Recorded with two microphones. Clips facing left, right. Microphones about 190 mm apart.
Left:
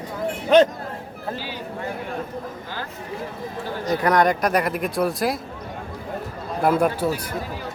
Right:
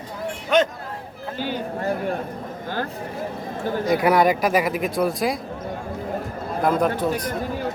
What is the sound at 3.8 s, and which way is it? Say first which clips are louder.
Speech: right 1 dB; 10° right (ahead or behind).